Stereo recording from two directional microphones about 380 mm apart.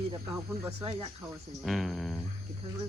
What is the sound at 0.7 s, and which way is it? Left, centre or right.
Speech, centre.